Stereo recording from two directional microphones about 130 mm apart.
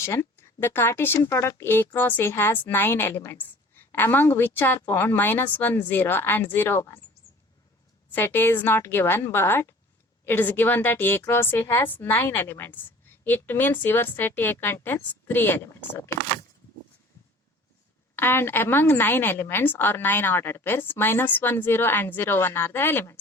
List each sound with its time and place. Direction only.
0.0 s speech: 20° left (ahead or behind)
8.1 s speech: 15° left (ahead or behind)
18.2 s speech: 15° left (ahead or behind)